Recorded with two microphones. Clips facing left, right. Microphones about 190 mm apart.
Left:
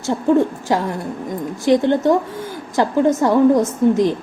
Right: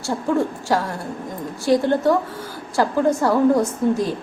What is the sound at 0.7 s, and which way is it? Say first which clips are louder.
A woman's voice: left 2 dB; 20° left (ahead or behind).